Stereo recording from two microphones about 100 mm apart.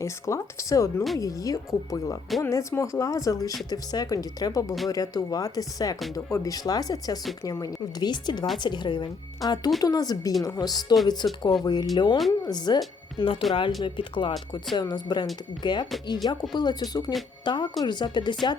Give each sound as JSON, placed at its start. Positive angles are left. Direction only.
{"t": 0.0, "sound": "speech", "side_deg": 30}
{"t": 13.1, "sound": "speech", "side_deg": 60}
{"t": 13.5, "sound": "speech", "side_deg": 50}
{"t": 14.8, "sound": "speech", "side_deg": 45}